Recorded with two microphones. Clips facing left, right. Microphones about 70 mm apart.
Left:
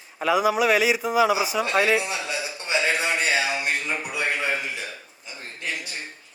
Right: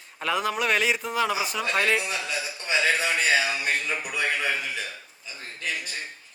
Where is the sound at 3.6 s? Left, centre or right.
Left.